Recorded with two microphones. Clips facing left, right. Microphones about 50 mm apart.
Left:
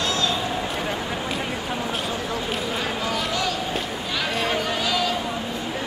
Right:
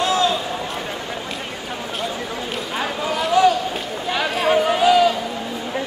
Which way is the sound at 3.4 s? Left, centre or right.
Right.